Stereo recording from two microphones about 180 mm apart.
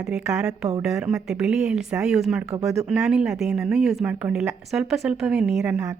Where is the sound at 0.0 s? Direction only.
5° right (ahead or behind).